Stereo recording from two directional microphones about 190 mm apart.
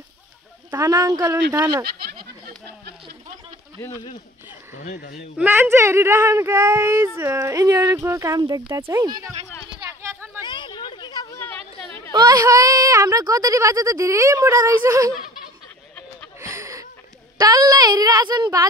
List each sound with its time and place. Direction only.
0.7 s speech: 15° right (ahead or behind)
3.8 s speech: 20° left (ahead or behind)
4.7 s speech: 40° left (ahead or behind)
5.4 s speech: 10° right (ahead or behind)
10.4 s a sound: 25° left (ahead or behind)
12.1 s speech: 20° right (ahead or behind)
16.3 s a sound: 15° right (ahead or behind)
17.4 s a woman's voice: 20° right (ahead or behind)